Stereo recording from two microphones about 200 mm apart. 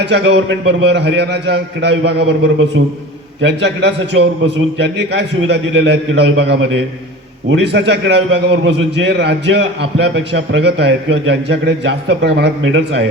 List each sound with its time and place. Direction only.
0.0 s a man's voice: 60° right (ahead or behind)